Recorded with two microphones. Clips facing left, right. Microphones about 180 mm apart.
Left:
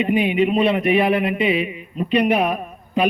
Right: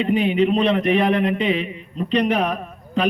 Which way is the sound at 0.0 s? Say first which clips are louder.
Even; 10° left (ahead or behind).